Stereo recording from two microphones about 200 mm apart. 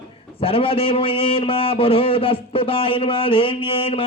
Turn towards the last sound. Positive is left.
turn(degrees=25)  # may be behind; listen again after turning